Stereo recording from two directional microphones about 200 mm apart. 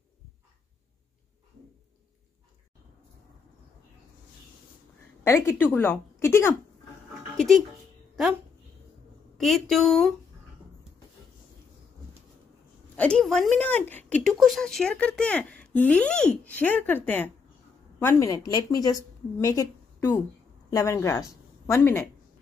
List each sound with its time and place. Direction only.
5.2 s a woman's voice: 15° left (ahead or behind)
7.3 s speech: centre (ahead or behind)
9.4 s a woman's voice: centre (ahead or behind)
12.9 s a woman's voice: 5° left (ahead or behind)